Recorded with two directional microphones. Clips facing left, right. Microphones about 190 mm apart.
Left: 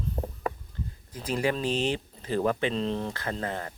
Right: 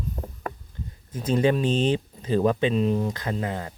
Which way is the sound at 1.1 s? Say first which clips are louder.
Right 6 dB; 25° right (ahead or behind).